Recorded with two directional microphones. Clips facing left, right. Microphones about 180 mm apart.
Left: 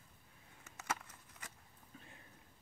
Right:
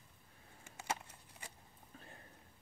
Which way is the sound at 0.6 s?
30° right (ahead or behind).